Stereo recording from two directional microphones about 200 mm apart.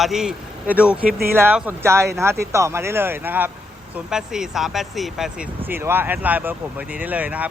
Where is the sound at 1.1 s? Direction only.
50° right (ahead or behind).